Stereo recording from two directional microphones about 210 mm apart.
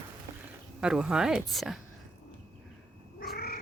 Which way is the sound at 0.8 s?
5° right (ahead or behind).